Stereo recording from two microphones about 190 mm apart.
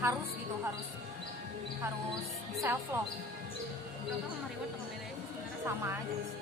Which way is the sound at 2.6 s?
10° right (ahead or behind).